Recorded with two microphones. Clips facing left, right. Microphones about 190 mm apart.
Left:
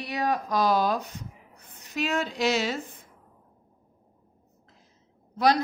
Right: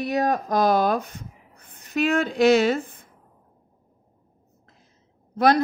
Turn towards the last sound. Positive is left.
turn(degrees=-55)  # may be behind; listen again after turning